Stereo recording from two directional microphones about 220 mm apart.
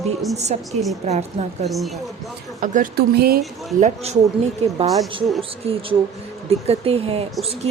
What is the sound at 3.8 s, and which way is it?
Speech, 30° right (ahead or behind).